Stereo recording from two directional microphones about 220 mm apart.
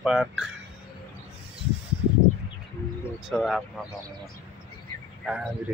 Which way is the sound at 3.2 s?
Centre (ahead or behind).